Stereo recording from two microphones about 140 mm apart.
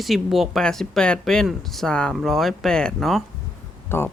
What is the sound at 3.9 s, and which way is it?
Speech, 15° left (ahead or behind).